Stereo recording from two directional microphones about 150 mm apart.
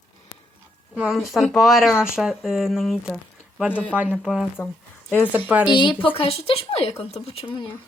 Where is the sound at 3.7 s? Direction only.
10° left (ahead or behind).